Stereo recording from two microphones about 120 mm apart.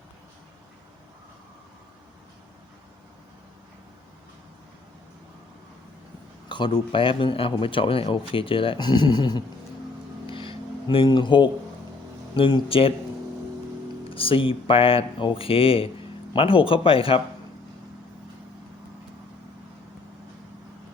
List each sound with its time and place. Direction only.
6.5 s speech: 45° left (ahead or behind)
10.2 s a sound: 45° left (ahead or behind)
12.4 s speech: 50° left (ahead or behind)
14.1 s speech: 50° left (ahead or behind)